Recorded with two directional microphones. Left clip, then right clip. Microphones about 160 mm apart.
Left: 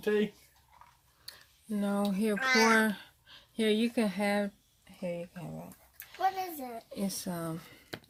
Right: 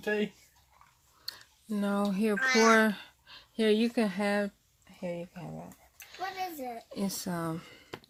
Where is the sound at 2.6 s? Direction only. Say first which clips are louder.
Right 3 dB; 25° right (ahead or behind).